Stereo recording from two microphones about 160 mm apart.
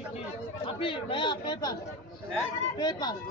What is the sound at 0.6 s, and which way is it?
A man's voice, 35° left (ahead or behind).